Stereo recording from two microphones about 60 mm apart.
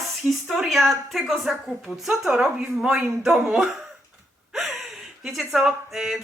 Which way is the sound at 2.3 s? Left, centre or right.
Centre.